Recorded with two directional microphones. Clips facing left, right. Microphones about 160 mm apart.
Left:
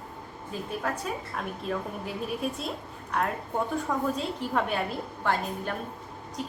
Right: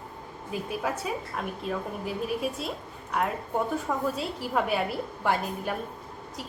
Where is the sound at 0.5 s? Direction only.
10° right (ahead or behind).